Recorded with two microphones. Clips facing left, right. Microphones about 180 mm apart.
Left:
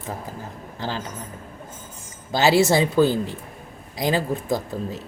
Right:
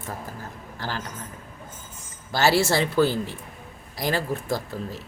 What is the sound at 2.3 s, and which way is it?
Speech, 20° left (ahead or behind).